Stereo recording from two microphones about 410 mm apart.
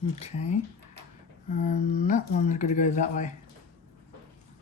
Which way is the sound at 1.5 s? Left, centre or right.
Centre.